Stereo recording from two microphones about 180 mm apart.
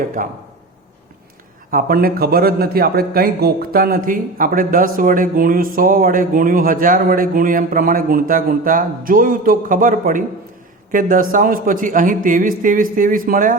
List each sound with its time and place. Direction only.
0.2 s a man's voice: 50° right (ahead or behind)
1.7 s a man's voice: 55° right (ahead or behind)